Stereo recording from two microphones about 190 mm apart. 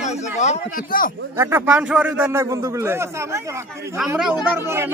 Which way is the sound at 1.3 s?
10° right (ahead or behind).